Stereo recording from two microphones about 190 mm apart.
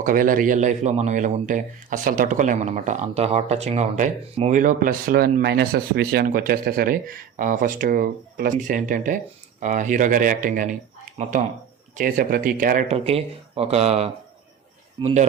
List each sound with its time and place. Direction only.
0.0 s speech: 45° right (ahead or behind)
13.1 s speech: 30° right (ahead or behind)